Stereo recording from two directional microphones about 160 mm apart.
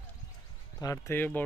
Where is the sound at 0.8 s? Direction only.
20° left (ahead or behind).